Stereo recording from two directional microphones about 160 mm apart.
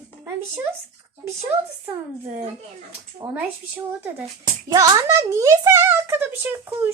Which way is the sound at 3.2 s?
25° right (ahead or behind).